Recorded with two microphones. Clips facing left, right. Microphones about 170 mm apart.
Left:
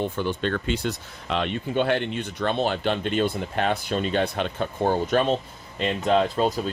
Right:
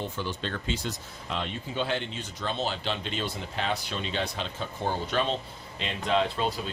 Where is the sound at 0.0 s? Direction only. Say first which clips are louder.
Left 8 dB; 55° left (ahead or behind).